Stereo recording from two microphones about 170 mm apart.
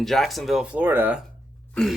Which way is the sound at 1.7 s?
5° left (ahead or behind).